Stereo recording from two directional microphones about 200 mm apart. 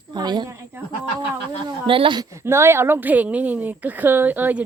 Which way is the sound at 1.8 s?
25° right (ahead or behind).